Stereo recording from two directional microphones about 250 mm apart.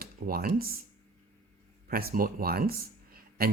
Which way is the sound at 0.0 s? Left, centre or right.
Right.